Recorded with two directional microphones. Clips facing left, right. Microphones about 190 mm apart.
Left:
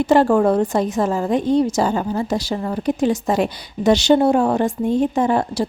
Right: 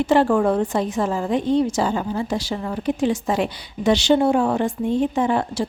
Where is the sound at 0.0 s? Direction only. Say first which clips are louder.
Left 3 dB; 40° left (ahead or behind).